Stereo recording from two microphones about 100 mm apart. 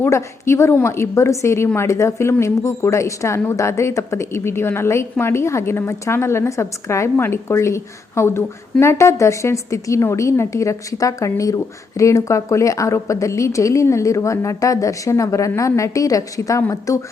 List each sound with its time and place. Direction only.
0.0 s a woman's voice: 25° left (ahead or behind)